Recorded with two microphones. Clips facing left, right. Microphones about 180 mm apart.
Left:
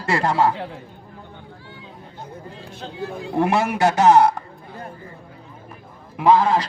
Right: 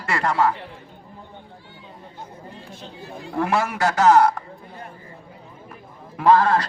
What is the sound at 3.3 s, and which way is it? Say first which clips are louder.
Speech: left 3 dB; 25° left (ahead or behind).